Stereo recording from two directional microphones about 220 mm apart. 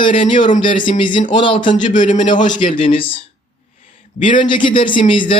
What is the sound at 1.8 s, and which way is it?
Speech, 35° left (ahead or behind).